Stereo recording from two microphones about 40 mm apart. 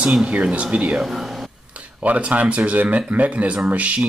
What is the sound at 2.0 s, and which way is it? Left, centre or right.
Speech, right.